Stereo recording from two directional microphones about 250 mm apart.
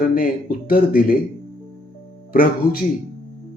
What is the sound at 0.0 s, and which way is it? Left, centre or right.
A man's voice, left.